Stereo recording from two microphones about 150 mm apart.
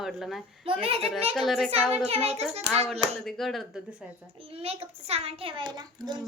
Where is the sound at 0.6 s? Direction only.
35° right (ahead or behind).